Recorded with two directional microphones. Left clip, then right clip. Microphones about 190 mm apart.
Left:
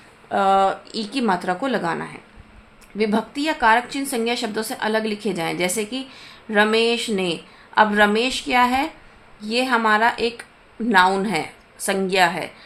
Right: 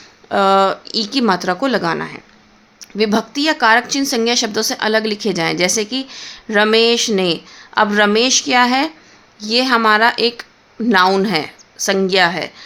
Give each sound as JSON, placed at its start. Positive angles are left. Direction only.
{"t": 0.3, "sound": "speech", "side_deg": -40}